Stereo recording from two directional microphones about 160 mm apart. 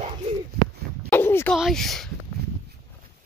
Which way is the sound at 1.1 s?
15° left (ahead or behind).